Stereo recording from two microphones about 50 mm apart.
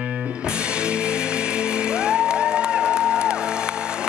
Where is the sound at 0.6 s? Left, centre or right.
Right.